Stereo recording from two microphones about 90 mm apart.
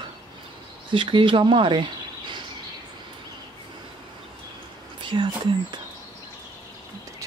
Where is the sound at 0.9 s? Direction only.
70° right (ahead or behind).